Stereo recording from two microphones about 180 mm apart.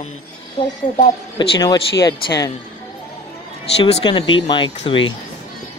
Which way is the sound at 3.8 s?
25° left (ahead or behind).